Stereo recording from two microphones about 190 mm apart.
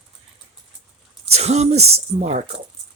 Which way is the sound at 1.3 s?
35° right (ahead or behind).